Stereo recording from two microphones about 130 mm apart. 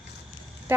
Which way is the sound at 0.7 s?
15° right (ahead or behind).